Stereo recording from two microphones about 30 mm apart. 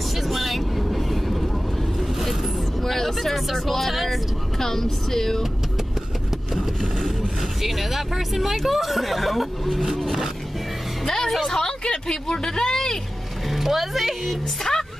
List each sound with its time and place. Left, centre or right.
0.1 s vehicle: centre
2.8 s speech: centre
4.6 s speech: centre
6.8 s speech: centre
7.6 s speech: centre
11.1 s music: centre
11.3 s a woman's voice: centre
11.8 s speech: left
13.5 s speech: centre
14.6 s a woman's voice: centre